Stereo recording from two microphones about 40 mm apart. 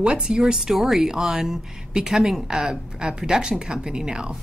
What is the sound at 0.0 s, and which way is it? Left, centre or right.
Speech, centre.